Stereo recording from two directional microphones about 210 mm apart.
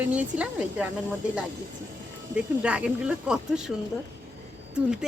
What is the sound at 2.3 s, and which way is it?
Speech, 5° right (ahead or behind).